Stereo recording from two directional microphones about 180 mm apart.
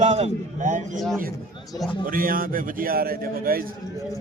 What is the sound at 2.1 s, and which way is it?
A man's voice, 50° right (ahead or behind).